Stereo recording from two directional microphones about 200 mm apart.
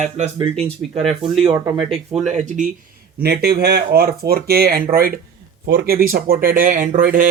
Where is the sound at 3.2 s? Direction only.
55° right (ahead or behind).